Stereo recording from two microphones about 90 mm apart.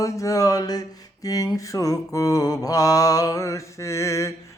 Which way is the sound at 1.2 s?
40° left (ahead or behind).